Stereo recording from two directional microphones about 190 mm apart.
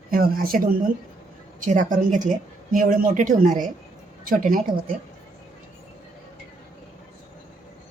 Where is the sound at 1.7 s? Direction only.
40° right (ahead or behind).